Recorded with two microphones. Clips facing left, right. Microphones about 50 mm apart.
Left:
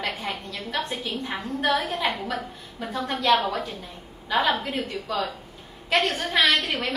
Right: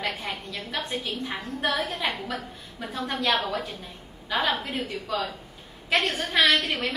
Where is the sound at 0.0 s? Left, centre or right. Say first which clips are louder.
Left 1 dB; centre.